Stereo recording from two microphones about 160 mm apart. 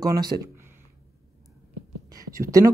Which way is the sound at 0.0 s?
25° right (ahead or behind).